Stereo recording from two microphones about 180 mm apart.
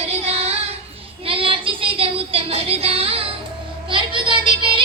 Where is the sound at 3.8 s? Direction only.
25° right (ahead or behind).